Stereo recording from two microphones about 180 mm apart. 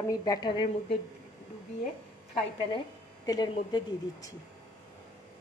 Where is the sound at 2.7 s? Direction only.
20° left (ahead or behind).